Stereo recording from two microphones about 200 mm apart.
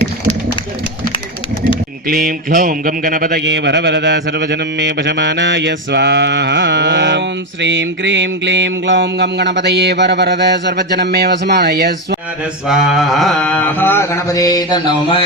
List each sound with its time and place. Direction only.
2.0 s a sound: 45° right (ahead or behind)
3.4 s mantra: 60° right (ahead or behind)
12.6 s mantra: centre (ahead or behind); by 15.2 s 20° left (ahead or behind)